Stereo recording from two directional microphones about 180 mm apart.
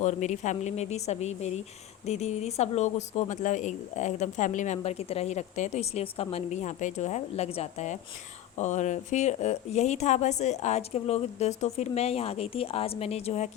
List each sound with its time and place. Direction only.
0.0 s speech: 40° left (ahead or behind)